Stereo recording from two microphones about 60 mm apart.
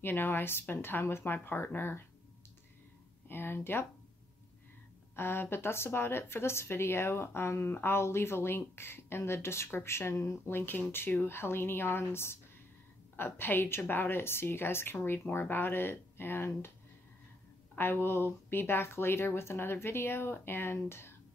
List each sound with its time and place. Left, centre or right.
0.0 s a woman's voice: left
3.3 s a woman's voice: left
5.1 s a woman's voice: left
17.7 s a woman's voice: left